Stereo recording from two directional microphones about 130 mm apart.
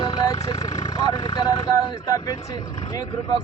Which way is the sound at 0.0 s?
30° left (ahead or behind).